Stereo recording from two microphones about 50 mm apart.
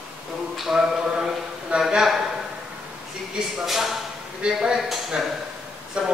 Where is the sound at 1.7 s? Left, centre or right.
Right.